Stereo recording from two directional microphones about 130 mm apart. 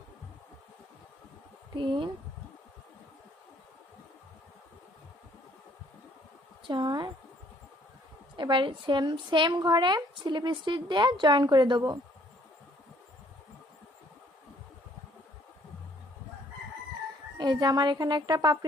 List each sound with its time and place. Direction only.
1.7 s a woman's voice: 40° right (ahead or behind)
6.7 s a woman's voice: 35° right (ahead or behind)
8.4 s a woman's voice: 35° right (ahead or behind)
17.3 s a woman's voice: 35° right (ahead or behind)